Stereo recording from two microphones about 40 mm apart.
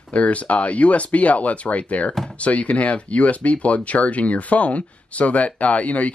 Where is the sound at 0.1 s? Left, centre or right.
Left.